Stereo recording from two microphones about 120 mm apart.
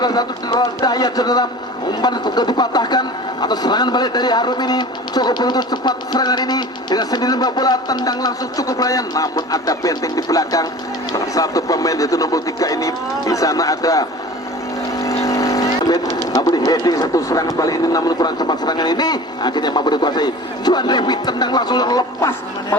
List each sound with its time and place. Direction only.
0.0 s a man's voice: 35° left (ahead or behind)
14.9 s vehicle: 30° left (ahead or behind)
16.3 s a man's voice: 30° left (ahead or behind)